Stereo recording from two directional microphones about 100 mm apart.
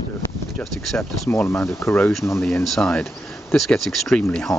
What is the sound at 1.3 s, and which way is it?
Speech, 20° left (ahead or behind).